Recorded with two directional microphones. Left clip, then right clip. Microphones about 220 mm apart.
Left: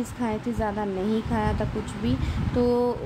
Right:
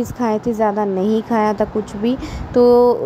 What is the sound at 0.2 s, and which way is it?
Speech, 20° right (ahead or behind).